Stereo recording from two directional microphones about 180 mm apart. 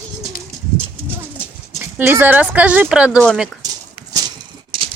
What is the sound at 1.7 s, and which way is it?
Speech, 10° right (ahead or behind).